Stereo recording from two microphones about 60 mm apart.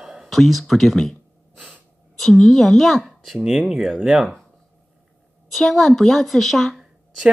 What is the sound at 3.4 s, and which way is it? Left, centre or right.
Speech, centre.